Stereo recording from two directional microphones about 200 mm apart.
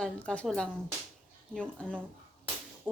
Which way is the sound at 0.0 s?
5° left (ahead or behind).